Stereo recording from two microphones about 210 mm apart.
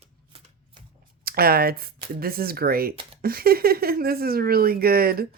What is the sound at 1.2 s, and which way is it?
Speech, 45° right (ahead or behind).